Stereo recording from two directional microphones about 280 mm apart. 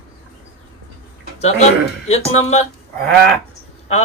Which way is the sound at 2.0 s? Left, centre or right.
Left.